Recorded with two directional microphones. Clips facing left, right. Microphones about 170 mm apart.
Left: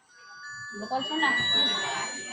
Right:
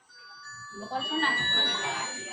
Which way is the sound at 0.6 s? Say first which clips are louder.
Left 3 dB; 70° left (ahead or behind).